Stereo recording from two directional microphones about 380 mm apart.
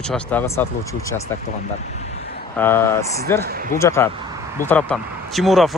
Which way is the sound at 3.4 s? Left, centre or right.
Right.